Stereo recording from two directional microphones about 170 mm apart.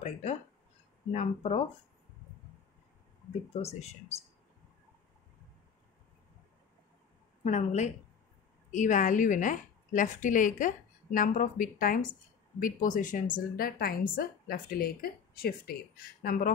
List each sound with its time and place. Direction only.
0.0 s a sound: 40° left (ahead or behind)
1.1 s speech: 40° left (ahead or behind)
7.4 s a woman's voice: 45° left (ahead or behind)